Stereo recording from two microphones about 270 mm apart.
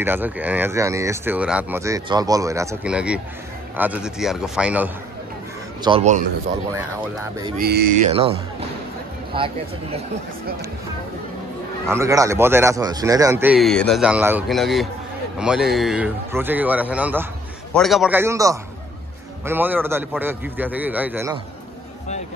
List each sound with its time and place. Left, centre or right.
0.0 s speech: centre
5.9 s speech: right
7.5 s speech: right
8.1 s speech: right
11.9 s speech: centre